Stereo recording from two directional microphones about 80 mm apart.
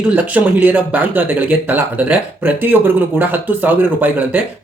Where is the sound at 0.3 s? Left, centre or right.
Right.